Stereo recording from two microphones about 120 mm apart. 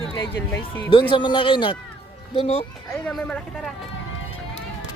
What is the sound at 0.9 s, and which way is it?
Speech, 45° left (ahead or behind).